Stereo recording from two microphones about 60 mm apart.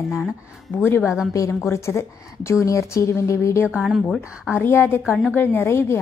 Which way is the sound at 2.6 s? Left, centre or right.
Left.